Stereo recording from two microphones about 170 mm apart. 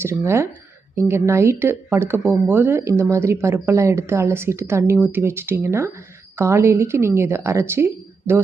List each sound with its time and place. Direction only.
0.0 s speech: 15° right (ahead or behind)